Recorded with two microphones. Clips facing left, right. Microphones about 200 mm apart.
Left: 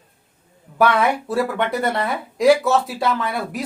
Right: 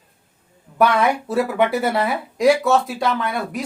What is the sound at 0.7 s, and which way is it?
Speech, centre (ahead or behind).